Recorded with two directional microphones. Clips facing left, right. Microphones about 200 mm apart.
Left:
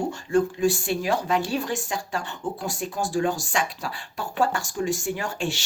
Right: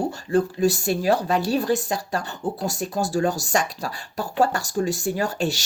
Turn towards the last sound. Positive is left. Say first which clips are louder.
# right 4 dB
turn(degrees=-40)  # may be behind; listen again after turning